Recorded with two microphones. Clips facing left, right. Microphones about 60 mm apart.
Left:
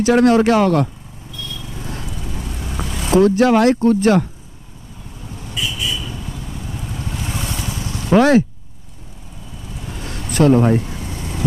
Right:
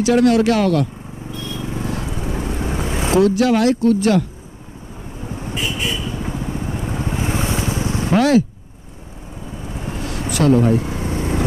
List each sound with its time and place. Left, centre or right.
0.0 s speech: left
1.3 s vehicle: right
3.2 s speech: left
5.2 s vehicle: right
8.1 s speech: left
9.7 s vehicle: right
10.3 s speech: left
10.8 s vehicle: right